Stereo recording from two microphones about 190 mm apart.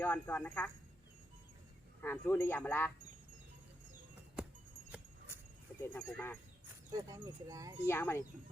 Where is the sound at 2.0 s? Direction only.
10° left (ahead or behind).